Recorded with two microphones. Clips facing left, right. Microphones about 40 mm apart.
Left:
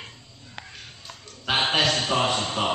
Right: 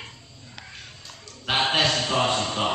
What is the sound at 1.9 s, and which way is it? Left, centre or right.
Speech, left.